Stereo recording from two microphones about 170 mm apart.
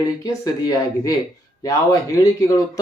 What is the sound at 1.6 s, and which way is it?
Speech, 20° left (ahead or behind).